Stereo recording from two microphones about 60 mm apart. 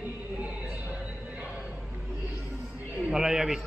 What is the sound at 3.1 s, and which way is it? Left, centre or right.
Speech, centre.